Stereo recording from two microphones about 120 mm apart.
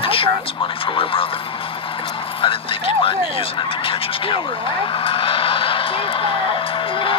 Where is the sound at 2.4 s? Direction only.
45° left (ahead or behind).